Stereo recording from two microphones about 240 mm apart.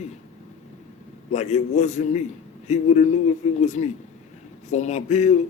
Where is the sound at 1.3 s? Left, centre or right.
Left.